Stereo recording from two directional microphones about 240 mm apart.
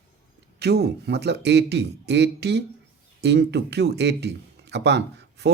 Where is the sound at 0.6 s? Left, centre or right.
Right.